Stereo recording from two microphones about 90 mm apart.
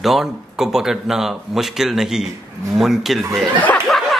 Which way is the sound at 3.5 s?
15° left (ahead or behind).